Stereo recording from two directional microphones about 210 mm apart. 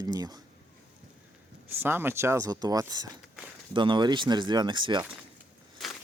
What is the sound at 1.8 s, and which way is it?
Speech, 10° right (ahead or behind).